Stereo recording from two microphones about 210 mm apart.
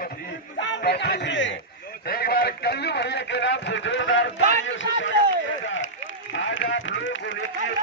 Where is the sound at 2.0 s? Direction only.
45° left (ahead or behind).